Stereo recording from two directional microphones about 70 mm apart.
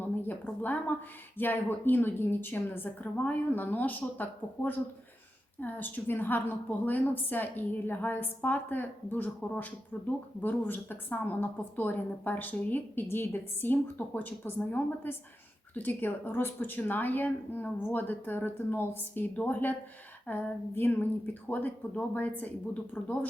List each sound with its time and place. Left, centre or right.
0.2 s a woman's voice: left